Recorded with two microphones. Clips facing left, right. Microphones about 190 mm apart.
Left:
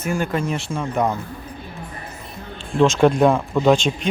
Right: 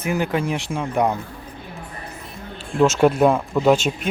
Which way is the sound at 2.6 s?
5° right (ahead or behind).